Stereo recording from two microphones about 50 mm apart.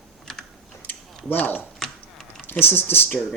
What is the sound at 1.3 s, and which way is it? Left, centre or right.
Speech, left.